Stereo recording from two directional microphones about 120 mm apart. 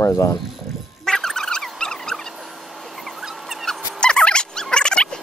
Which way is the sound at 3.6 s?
5° left (ahead or behind).